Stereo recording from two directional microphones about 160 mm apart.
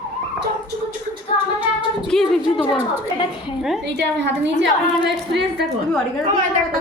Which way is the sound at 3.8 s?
90° right.